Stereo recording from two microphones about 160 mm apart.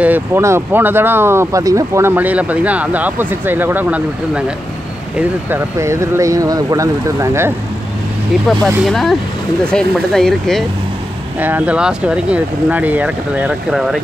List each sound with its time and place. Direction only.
0.0 s speech: 10° right (ahead or behind)
8.5 s speech: centre (ahead or behind)
11.3 s speech: 10° right (ahead or behind)